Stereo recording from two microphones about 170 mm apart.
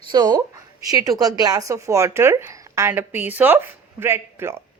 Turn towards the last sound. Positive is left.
turn(degrees=-15)  # may be behind; listen again after turning